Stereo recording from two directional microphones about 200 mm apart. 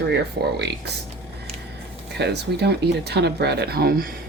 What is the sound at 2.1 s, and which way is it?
Speech, 55° right (ahead or behind).